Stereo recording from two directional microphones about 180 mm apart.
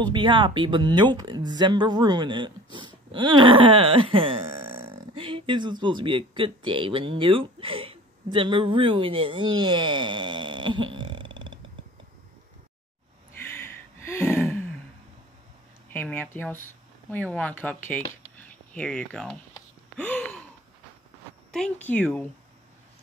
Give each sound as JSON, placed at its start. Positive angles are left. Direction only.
{"t": 0.0, "sound": "speech", "side_deg": -25}
{"t": 13.5, "sound": "a sound", "side_deg": 15}
{"t": 15.9, "sound": "speech", "side_deg": 10}
{"t": 21.5, "sound": "speech", "side_deg": 5}